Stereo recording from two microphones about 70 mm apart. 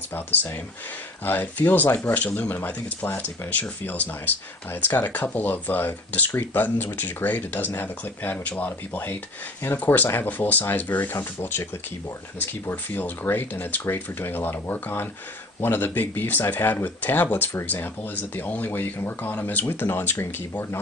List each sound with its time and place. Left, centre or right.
0.1 s speech: left